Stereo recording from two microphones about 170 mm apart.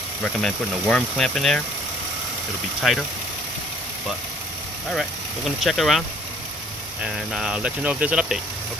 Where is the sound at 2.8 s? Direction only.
Centre (ahead or behind).